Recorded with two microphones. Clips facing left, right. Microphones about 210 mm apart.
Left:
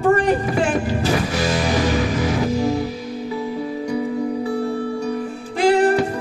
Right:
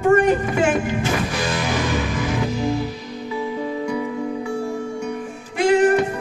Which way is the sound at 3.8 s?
35° left (ahead or behind).